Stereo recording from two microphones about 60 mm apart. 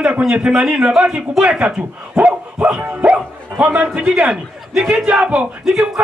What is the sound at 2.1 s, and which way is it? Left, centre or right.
Dog, right.